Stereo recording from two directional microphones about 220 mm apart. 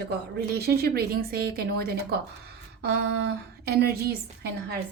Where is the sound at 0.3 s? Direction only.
45° right (ahead or behind).